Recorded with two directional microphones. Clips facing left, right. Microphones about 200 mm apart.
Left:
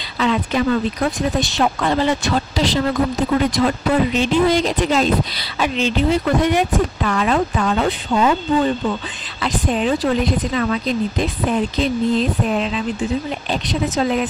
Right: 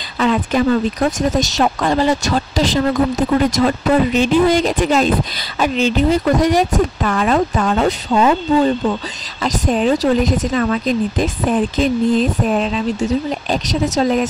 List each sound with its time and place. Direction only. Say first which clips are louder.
0.2 s speech: right 3 dB; 45° right (ahead or behind)